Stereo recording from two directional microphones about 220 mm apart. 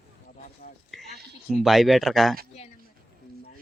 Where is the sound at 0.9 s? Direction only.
Centre (ahead or behind).